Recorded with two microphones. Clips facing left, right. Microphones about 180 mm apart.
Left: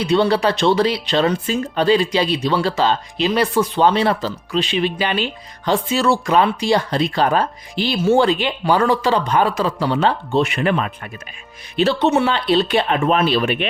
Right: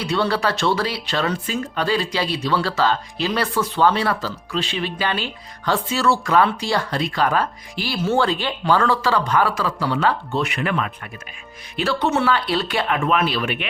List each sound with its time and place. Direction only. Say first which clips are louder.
0.0 s speech: left 5 dB; 20° left (ahead or behind)